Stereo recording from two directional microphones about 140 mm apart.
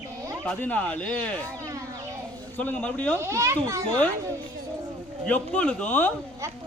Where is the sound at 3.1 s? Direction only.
20° right (ahead or behind).